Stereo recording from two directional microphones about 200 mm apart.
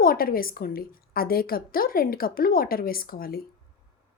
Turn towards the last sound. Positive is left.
turn(degrees=45)  # may be behind; listen again after turning